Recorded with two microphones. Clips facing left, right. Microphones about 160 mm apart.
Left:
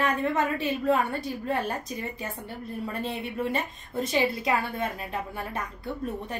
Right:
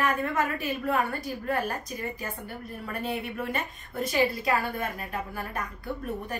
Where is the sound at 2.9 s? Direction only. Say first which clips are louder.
Right 2 dB; 25° left (ahead or behind).